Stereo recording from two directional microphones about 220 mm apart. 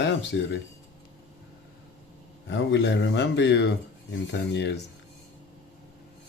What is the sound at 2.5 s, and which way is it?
Speech, 55° left (ahead or behind).